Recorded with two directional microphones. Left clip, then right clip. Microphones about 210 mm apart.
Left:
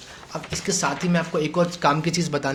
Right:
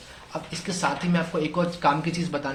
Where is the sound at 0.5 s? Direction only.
40° left (ahead or behind).